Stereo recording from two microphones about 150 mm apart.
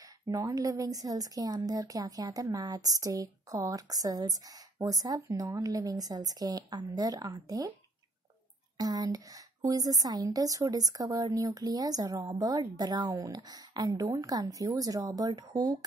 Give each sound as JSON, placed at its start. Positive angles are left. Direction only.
{"t": 0.0, "sound": "a woman's voice", "side_deg": -20}
{"t": 8.7, "sound": "a woman's voice", "side_deg": -25}